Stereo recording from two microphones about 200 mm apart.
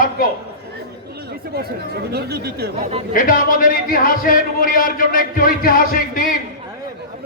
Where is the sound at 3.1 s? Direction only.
45° left (ahead or behind).